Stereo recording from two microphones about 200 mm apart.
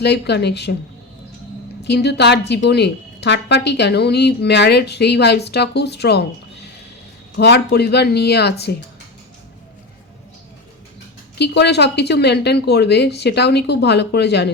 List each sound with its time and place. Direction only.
0.0 s a woman's voice: 60° left (ahead or behind)
1.8 s a woman's voice: 55° left (ahead or behind)
7.3 s a woman's voice: 55° left (ahead or behind)
11.3 s a woman's voice: 55° left (ahead or behind)